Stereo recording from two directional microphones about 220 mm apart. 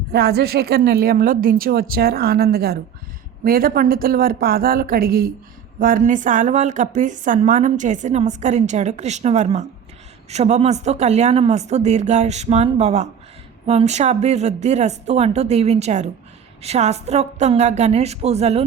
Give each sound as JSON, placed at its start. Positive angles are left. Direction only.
{"t": 0.1, "sound": "a woman's voice", "side_deg": -45}